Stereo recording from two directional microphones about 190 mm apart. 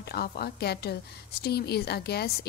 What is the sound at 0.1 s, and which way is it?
A woman's voice, 55° left (ahead or behind).